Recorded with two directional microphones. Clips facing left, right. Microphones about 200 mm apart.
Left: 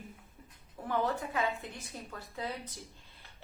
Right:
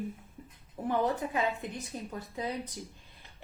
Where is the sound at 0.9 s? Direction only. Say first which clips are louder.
Right 3 dB; 20° right (ahead or behind).